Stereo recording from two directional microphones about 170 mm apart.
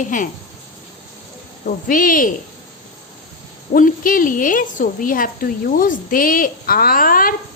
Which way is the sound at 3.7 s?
50° left (ahead or behind).